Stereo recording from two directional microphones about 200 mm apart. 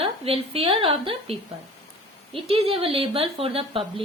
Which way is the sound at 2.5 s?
30° right (ahead or behind).